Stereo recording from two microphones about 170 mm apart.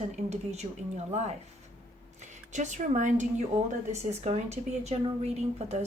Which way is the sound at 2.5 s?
45° right (ahead or behind).